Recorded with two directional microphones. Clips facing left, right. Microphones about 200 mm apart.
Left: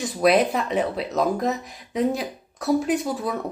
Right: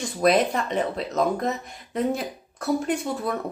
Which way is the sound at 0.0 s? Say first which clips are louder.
Left 2 dB; centre (ahead or behind).